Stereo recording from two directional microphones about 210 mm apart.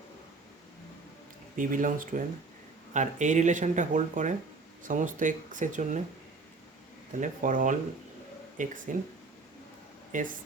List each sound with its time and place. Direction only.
1.5 s speech: 40° right (ahead or behind)
7.2 s speech: 40° right (ahead or behind)
10.1 s speech: 40° right (ahead or behind)